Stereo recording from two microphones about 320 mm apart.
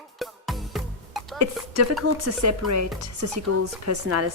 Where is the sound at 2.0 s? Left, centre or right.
Right.